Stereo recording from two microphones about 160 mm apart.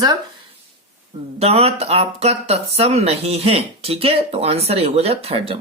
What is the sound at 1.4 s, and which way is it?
Speech, 40° right (ahead or behind).